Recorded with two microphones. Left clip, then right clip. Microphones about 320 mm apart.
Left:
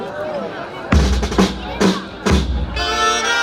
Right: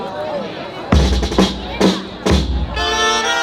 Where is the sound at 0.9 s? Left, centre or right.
Centre.